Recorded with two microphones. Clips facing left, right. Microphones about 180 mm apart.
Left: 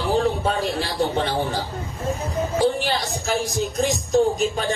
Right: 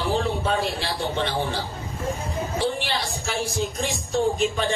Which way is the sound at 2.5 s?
45° left (ahead or behind).